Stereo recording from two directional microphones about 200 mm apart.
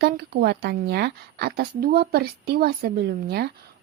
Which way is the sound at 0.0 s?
55° right (ahead or behind).